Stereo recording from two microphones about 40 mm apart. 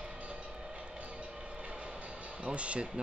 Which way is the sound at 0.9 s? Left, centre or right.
Right.